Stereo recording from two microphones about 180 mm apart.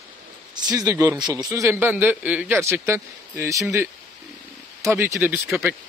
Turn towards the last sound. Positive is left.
turn(degrees=-10)  # may be behind; listen again after turning